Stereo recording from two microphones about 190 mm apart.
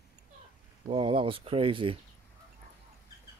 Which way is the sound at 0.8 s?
25° right (ahead or behind).